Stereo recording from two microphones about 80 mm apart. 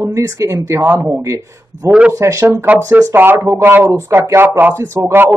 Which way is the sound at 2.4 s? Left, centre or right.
Right.